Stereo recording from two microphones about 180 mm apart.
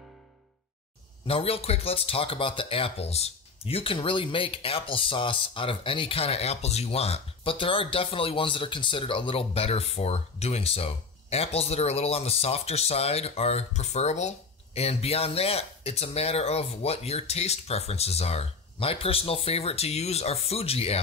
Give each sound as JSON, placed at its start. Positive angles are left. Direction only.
{"t": 1.2, "sound": "speech", "side_deg": 35}